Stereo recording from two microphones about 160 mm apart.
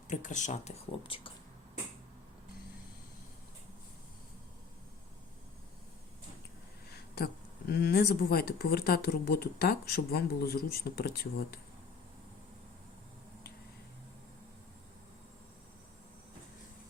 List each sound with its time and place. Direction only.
0.1 s speech: 50° left (ahead or behind); by 1.3 s 35° left (ahead or behind)
7.7 s speech: 85° left